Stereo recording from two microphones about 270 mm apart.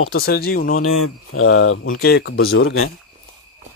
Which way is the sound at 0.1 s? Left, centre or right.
Left.